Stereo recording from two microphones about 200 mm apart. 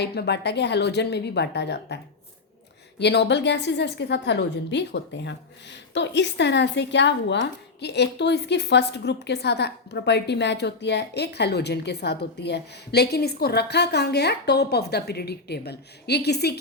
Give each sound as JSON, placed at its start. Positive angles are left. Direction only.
{"t": 0.0, "sound": "a woman's voice", "side_deg": 55}
{"t": 3.0, "sound": "a woman's voice", "side_deg": 55}